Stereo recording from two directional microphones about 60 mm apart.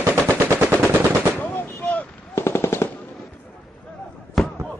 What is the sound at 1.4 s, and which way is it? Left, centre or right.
Artillery fire, left.